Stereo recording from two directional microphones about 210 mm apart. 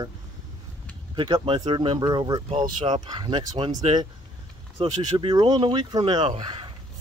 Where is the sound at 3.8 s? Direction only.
30° right (ahead or behind).